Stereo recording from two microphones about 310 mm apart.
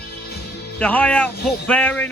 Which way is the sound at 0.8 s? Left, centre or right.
Centre.